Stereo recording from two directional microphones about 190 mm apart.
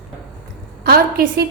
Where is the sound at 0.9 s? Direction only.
55° right (ahead or behind).